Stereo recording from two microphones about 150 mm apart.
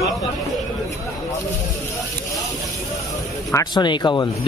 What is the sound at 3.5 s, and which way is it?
Speech, 30° left (ahead or behind).